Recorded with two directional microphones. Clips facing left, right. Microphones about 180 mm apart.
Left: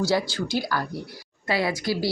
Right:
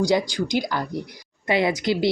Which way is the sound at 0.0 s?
15° right (ahead or behind).